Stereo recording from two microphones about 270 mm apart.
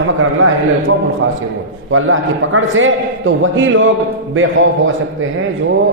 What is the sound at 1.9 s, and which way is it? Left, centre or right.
A man's voice, right.